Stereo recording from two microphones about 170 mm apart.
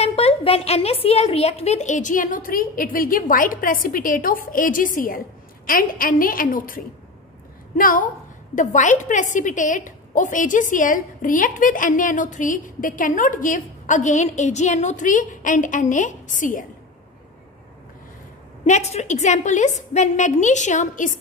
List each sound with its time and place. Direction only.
0.0 s a woman's voice: 40° left (ahead or behind)
18.7 s a woman's voice: 40° left (ahead or behind)